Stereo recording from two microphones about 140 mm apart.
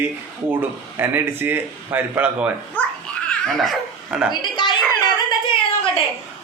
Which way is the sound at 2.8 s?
10° left (ahead or behind).